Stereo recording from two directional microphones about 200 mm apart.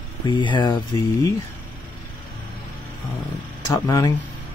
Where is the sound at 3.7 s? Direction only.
15° left (ahead or behind).